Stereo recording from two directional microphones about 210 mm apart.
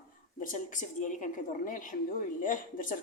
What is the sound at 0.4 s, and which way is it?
A woman's voice, 40° left (ahead or behind).